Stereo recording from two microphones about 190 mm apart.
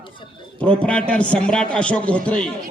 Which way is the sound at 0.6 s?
5° left (ahead or behind).